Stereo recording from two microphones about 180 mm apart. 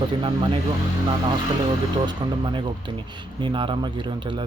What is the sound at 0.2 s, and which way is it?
Speech, 25° right (ahead or behind).